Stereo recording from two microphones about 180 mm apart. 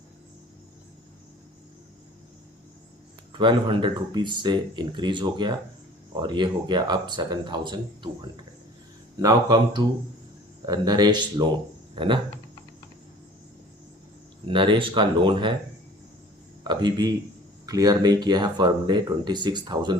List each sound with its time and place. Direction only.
3.3 s speech: 25° right (ahead or behind)
9.1 s speech: 25° right (ahead or behind)
14.4 s speech: 25° right (ahead or behind)
16.6 s speech: 25° right (ahead or behind)